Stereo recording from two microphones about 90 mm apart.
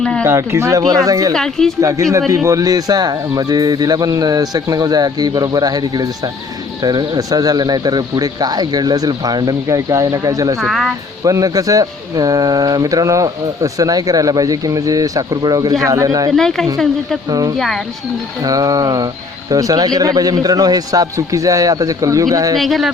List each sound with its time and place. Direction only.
0.0 s speech: 10° left (ahead or behind)
0.3 s speech: 30° right (ahead or behind)
0.8 s speech: 45° right (ahead or behind)
1.3 s speech: 5° left (ahead or behind)
1.8 s speech: 35° right (ahead or behind)
10.6 s speech: centre (ahead or behind)
11.2 s speech: 40° right (ahead or behind)
16.3 s speech: 5° left (ahead or behind)
17.2 s speech: 45° right (ahead or behind)
22.5 s speech: centre (ahead or behind)